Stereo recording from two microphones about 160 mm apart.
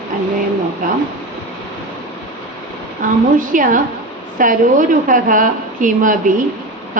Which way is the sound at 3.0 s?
55° right (ahead or behind).